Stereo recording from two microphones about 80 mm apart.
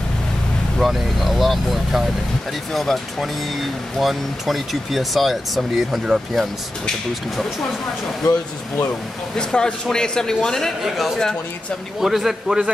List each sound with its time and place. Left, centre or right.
0.7 s speech: centre
9.4 s a man's voice: centre